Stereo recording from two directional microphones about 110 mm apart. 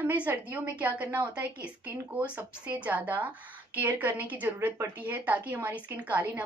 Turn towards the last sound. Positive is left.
turn(degrees=-15)  # may be behind; listen again after turning